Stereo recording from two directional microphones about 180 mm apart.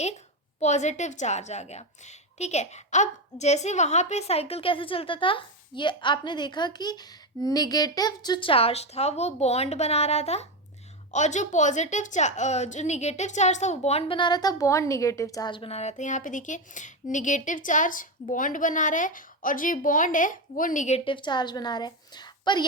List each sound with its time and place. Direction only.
0.6 s a woman's voice: 40° left (ahead or behind); by 22.6 s 25° left (ahead or behind)